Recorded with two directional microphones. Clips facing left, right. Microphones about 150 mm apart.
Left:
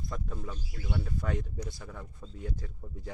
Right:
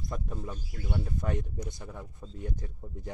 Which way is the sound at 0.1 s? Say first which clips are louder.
Right 3 dB; 20° right (ahead or behind).